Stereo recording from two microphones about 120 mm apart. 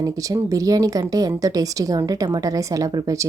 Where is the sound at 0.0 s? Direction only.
25° right (ahead or behind).